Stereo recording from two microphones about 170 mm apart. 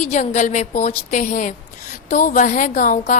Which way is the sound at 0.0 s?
45° left (ahead or behind).